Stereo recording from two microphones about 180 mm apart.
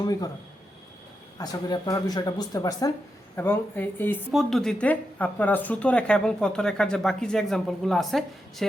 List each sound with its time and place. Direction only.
0.0 s speech: 20° left (ahead or behind)
1.4 s speech: 20° left (ahead or behind)
4.3 s speech: centre (ahead or behind)